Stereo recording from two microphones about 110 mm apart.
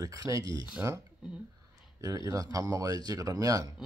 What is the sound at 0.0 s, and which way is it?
Speech, 35° right (ahead or behind).